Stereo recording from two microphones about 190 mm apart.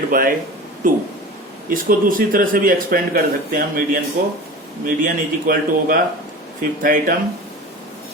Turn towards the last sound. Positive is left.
turn(degrees=-45)  # may be behind; listen again after turning